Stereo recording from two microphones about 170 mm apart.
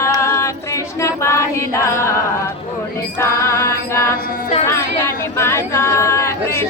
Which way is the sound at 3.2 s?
15° left (ahead or behind).